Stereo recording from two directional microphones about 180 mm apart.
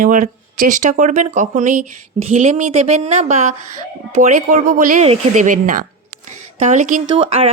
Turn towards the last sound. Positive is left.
turn(degrees=-30)  # may be behind; listen again after turning